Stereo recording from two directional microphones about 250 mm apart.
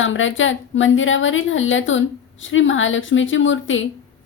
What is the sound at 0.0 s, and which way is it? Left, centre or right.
A woman's voice, left.